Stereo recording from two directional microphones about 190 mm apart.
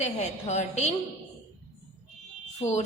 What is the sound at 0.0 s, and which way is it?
Speech, 35° left (ahead or behind).